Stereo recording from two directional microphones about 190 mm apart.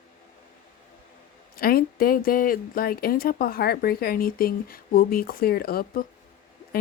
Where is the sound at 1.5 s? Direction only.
50° left (ahead or behind).